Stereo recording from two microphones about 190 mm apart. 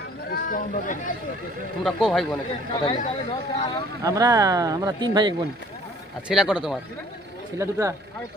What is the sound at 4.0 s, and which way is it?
Speech, 20° right (ahead or behind).